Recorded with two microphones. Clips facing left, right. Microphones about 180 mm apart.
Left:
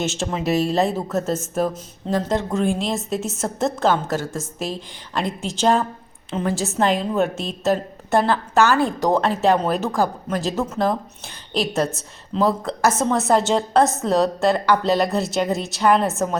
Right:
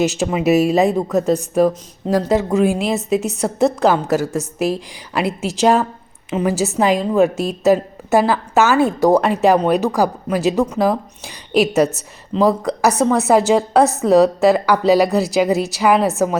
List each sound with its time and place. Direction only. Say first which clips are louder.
0.0 s speech: right 7 dB; centre (ahead or behind)